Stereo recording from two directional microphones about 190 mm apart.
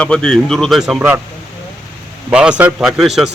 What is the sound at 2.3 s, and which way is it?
Speech, 5° right (ahead or behind).